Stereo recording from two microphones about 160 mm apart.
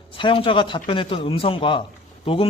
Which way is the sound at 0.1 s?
35° left (ahead or behind).